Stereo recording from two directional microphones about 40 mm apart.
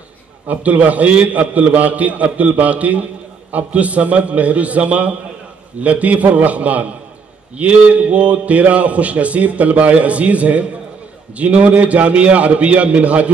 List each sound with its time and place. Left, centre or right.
0.5 s a man's voice: right